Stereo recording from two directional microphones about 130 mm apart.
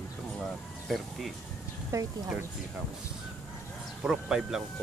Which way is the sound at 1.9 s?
25° right (ahead or behind).